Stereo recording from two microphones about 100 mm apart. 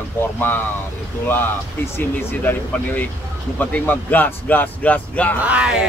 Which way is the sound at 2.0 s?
20° left (ahead or behind).